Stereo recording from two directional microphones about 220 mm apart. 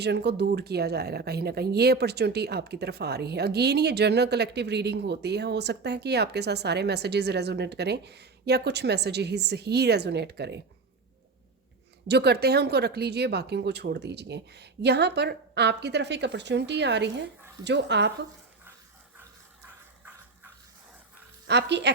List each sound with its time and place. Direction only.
0.0 s speech: 50° right (ahead or behind)
12.0 s speech: 50° right (ahead or behind)
21.4 s speech: 50° right (ahead or behind)